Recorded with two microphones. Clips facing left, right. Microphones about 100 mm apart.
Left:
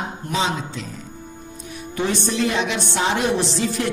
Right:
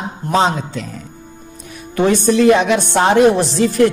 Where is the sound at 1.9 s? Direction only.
55° right (ahead or behind).